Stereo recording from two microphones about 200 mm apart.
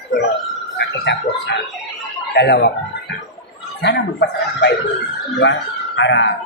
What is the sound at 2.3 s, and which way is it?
Speech, 55° left (ahead or behind).